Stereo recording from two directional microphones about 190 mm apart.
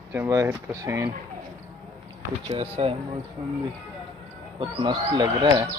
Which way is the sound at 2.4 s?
30° right (ahead or behind).